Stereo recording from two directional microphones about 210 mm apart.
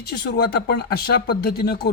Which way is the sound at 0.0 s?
50° left (ahead or behind).